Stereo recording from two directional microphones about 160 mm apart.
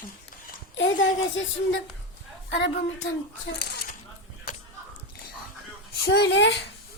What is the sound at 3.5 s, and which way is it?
Dishes, 85° left.